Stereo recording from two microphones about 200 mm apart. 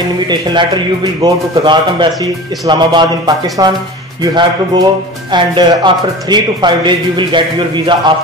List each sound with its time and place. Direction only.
0.3 s speech: 20° right (ahead or behind)